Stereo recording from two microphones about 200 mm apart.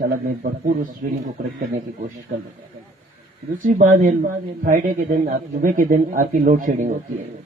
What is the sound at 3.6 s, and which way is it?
A man's voice, 40° right (ahead or behind).